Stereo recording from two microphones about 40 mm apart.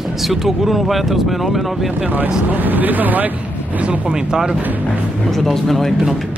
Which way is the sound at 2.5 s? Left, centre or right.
Right.